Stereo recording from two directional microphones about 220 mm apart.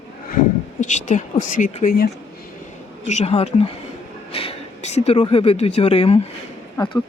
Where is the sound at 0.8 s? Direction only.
35° left (ahead or behind).